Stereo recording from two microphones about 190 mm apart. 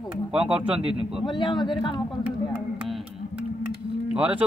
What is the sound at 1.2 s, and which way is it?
Speech, 25° left (ahead or behind).